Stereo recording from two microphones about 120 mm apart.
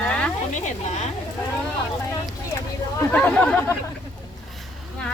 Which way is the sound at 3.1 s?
10° left (ahead or behind).